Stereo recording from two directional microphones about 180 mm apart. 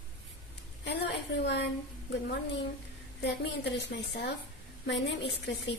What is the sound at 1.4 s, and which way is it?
Speech, 70° left (ahead or behind).